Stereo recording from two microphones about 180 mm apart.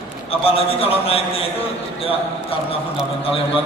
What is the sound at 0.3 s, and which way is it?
A man's voice, 30° left (ahead or behind).